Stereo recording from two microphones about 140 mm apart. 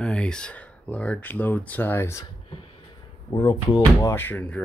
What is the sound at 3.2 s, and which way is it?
Speech, 30° left (ahead or behind).